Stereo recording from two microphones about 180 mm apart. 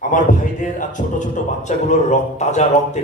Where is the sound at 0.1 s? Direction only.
45° left (ahead or behind).